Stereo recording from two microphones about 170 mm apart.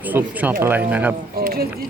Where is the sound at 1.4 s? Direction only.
60° right (ahead or behind).